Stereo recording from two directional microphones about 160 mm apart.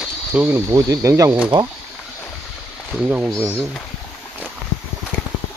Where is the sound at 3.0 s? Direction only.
10° right (ahead or behind).